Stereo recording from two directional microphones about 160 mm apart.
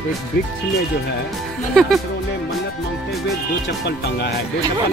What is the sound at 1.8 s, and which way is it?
Speech, 5° left (ahead or behind).